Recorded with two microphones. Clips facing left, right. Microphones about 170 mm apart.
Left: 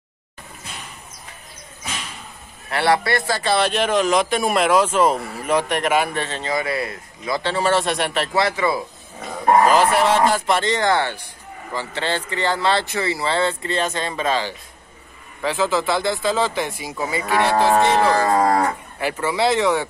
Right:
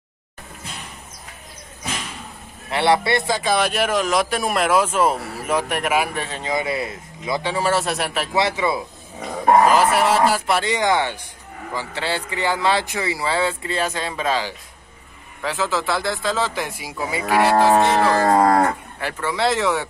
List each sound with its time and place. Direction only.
2.7 s speech: 25° right (ahead or behind); by 8.4 s 5° right (ahead or behind)
8.4 s speech: 20° right (ahead or behind)
9.5 s speech: 5° right (ahead or behind)
18.2 s moo: 40° right (ahead or behind)
19.2 s speech: centre (ahead or behind)